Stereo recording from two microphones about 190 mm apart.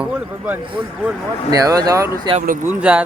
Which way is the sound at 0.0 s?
5° right (ahead or behind).